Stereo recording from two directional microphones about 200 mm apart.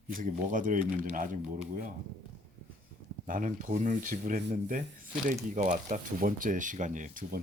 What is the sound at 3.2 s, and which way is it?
Speech, 40° right (ahead or behind).